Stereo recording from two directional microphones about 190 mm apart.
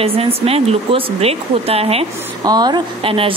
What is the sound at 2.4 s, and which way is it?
Speech, 20° right (ahead or behind).